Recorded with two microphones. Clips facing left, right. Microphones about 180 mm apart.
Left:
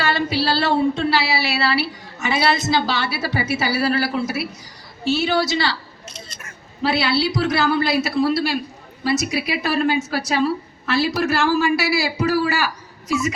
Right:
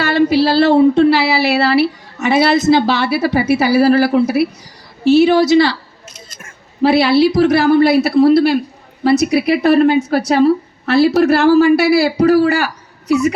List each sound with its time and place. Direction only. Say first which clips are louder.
0.0 s speech: right 9 dB; 55° right (ahead or behind)
6.1 s speech: even; 50° right (ahead or behind)